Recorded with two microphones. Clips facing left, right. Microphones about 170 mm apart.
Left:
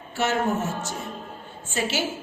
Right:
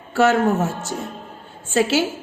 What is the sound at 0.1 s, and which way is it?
A woman's voice, 90° right.